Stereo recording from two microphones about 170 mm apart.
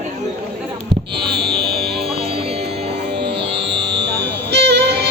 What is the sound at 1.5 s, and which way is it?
Music, 70° right (ahead or behind).